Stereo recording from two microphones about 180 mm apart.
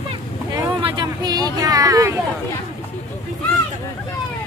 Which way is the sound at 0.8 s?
25° right (ahead or behind).